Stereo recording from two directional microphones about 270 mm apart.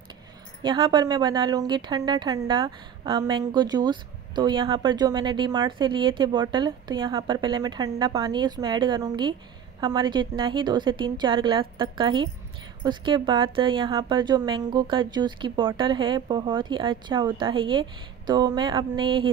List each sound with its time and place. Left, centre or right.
0.6 s a woman's voice: centre